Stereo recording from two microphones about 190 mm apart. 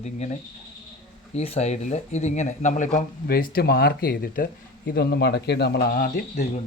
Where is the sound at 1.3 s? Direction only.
35° left (ahead or behind).